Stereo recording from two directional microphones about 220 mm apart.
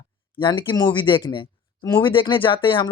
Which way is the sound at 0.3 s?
20° left (ahead or behind).